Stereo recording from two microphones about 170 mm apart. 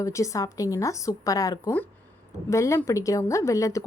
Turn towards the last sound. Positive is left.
turn(degrees=20)  # may be behind; listen again after turning